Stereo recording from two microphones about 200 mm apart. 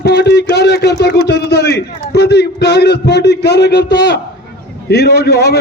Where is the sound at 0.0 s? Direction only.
55° left (ahead or behind).